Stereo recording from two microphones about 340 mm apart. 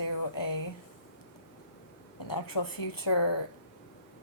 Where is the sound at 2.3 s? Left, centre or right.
Left.